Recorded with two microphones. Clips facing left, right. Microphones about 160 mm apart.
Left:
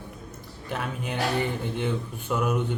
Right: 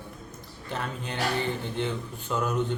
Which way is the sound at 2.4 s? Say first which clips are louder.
Left 1 dB; 10° left (ahead or behind).